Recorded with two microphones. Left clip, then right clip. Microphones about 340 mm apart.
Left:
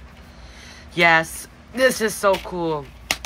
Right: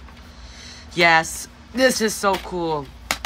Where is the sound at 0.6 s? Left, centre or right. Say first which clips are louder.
Even; centre.